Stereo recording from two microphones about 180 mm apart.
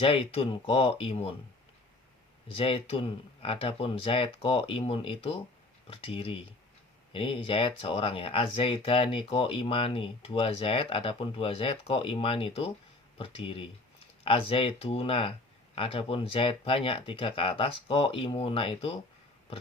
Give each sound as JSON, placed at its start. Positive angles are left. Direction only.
{"t": 0.0, "sound": "speech", "side_deg": 30}
{"t": 2.5, "sound": "speech", "side_deg": 30}